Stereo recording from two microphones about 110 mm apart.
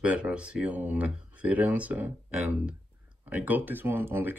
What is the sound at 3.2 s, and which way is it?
Speech, 15° right (ahead or behind).